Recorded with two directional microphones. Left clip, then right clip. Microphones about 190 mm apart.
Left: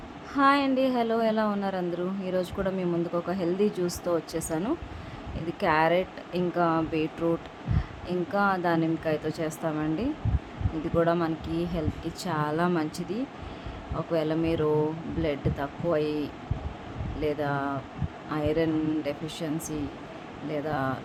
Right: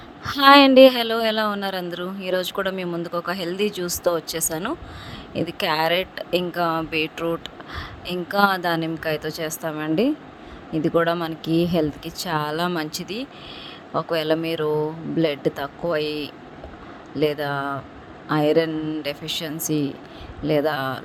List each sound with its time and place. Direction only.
0.3 s speech: 45° right (ahead or behind)